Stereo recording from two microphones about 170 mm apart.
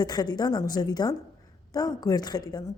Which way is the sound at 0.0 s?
25° left (ahead or behind).